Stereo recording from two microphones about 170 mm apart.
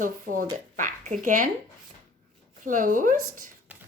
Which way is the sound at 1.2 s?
50° right (ahead or behind).